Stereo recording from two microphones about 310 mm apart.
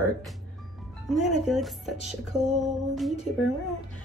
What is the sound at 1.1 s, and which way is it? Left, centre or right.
Speech, centre.